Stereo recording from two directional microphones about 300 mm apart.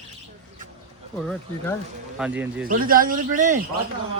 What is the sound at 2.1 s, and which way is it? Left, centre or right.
Speech, centre.